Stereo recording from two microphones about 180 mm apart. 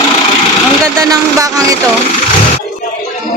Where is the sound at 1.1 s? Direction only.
20° right (ahead or behind).